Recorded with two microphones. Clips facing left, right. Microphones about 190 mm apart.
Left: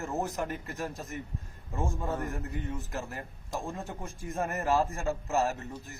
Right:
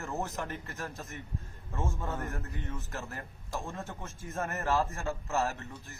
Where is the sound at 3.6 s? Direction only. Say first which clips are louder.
Left 3 dB; 15° left (ahead or behind).